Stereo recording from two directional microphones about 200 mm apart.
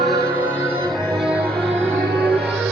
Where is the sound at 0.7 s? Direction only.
15° right (ahead or behind).